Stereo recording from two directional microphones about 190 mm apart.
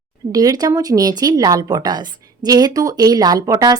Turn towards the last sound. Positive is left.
turn(degrees=-20)  # may be behind; listen again after turning